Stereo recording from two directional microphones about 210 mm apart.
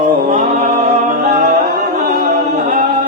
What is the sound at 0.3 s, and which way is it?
Music, 35° right (ahead or behind).